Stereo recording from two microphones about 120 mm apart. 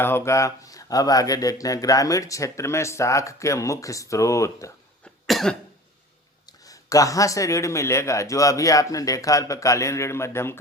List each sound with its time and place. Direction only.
0.0 s speech: 20° left (ahead or behind)
5.0 s cough: centre (ahead or behind)
6.7 s speech: 30° left (ahead or behind)